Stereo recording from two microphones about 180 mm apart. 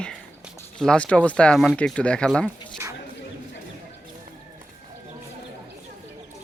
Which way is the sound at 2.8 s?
15° right (ahead or behind).